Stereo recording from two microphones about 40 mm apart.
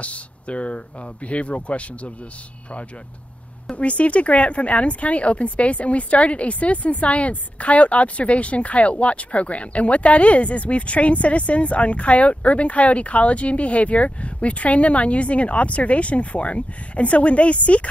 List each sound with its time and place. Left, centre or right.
0.0 s speech: left
3.7 s speech: left